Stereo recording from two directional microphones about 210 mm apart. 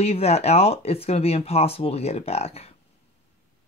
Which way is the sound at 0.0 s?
30° left (ahead or behind).